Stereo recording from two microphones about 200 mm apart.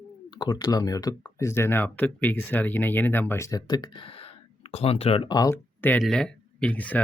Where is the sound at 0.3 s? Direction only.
20° left (ahead or behind).